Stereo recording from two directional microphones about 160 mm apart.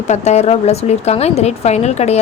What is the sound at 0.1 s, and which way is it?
A woman's voice, 45° left (ahead or behind).